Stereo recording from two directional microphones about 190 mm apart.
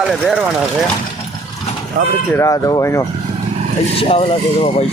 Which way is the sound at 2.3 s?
15° left (ahead or behind).